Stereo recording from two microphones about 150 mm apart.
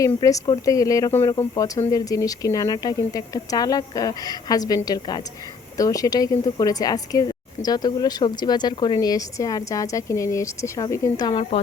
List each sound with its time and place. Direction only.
0.0 s a woman's voice: 20° left (ahead or behind)